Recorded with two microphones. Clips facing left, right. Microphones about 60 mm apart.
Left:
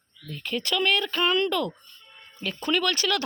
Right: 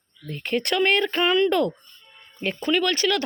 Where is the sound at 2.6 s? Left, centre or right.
Centre.